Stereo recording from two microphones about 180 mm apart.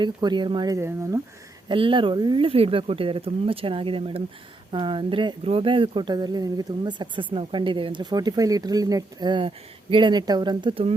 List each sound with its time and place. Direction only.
0.0 s speech: 25° right (ahead or behind)
1.6 s speech: 30° right (ahead or behind)